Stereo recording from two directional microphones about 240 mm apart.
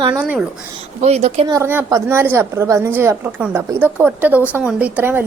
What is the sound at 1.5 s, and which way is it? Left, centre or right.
A woman's voice, centre.